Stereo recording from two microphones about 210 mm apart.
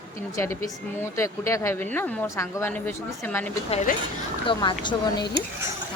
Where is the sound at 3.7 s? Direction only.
35° left (ahead or behind).